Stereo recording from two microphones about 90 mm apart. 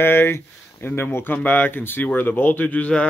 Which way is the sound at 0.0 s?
25° left (ahead or behind).